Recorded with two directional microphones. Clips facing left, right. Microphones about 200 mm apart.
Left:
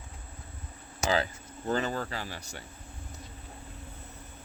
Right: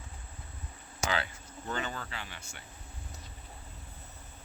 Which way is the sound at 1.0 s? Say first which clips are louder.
Left 5 dB; 35° left (ahead or behind).